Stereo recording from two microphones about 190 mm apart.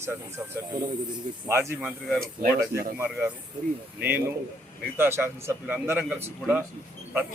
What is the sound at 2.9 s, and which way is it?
Speech, 10° right (ahead or behind).